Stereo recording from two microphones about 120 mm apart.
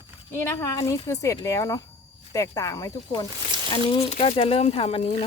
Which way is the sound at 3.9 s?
55° left (ahead or behind).